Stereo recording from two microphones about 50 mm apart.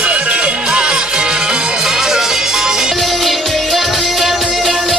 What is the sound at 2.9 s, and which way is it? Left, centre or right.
Music, centre.